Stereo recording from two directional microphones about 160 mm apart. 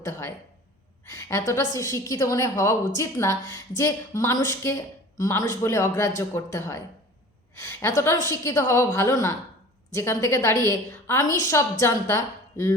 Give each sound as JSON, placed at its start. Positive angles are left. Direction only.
{"t": 0.0, "sound": "a woman's voice", "side_deg": 15}